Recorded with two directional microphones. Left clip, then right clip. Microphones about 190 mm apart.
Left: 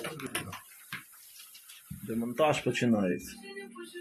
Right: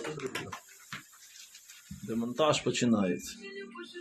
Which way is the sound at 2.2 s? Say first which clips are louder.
Even; 5° left (ahead or behind).